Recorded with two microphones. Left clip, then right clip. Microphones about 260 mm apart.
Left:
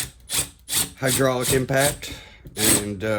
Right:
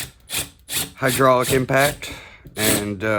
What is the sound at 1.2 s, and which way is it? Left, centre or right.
Speech, right.